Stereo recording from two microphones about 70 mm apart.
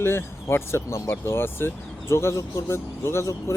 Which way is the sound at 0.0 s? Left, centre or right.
Left.